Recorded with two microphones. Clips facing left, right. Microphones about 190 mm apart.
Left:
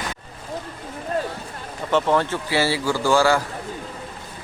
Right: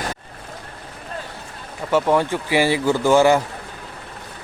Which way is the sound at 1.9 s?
10° right (ahead or behind).